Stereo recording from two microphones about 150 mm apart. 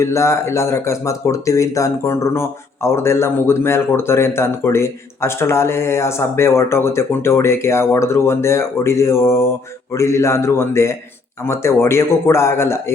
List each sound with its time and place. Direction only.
0.0 s a man's voice: 20° left (ahead or behind)